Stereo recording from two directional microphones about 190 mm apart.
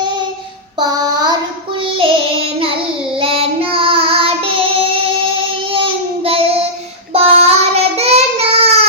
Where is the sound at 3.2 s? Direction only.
30° right (ahead or behind).